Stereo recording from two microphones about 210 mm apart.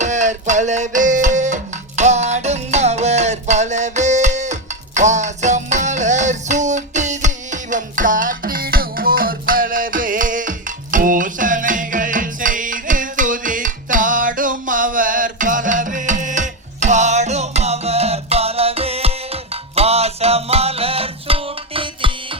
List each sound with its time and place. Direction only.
0.0 s music: 35° right (ahead or behind)